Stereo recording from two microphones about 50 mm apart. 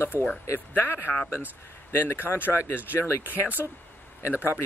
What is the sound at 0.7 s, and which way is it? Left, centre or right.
Speech, left.